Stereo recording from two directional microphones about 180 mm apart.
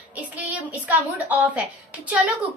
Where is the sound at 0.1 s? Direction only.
10° right (ahead or behind).